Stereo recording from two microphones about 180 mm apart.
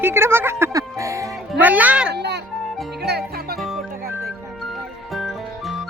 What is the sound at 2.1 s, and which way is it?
Music, 70° right (ahead or behind).